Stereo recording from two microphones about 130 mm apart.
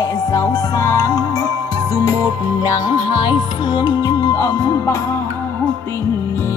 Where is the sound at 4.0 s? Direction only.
25° left (ahead or behind).